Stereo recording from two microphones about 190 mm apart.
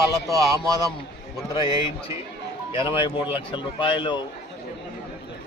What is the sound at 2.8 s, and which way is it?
A man's voice, 25° left (ahead or behind).